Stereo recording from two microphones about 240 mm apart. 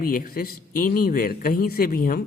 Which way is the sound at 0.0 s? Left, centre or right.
Left.